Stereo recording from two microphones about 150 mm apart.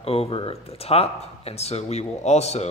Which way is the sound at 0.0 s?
40° left (ahead or behind).